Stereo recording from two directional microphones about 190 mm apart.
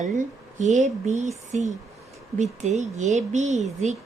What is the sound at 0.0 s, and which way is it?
A woman's voice, 40° right (ahead or behind).